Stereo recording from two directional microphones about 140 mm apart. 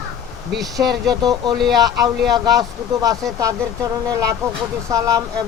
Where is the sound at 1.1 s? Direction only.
30° right (ahead or behind).